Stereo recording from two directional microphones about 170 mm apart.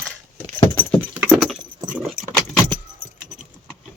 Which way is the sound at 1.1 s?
5° right (ahead or behind).